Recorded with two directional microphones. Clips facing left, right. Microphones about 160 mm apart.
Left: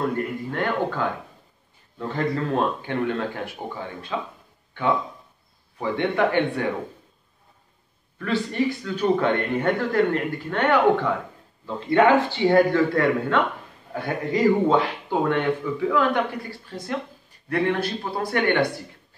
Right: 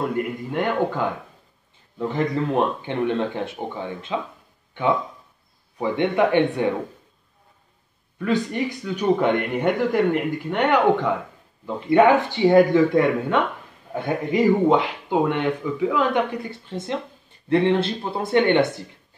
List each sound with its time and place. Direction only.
0.5 s speech: 15° right (ahead or behind)
5.8 s speech: 20° right (ahead or behind)
8.2 s speech: 15° right (ahead or behind)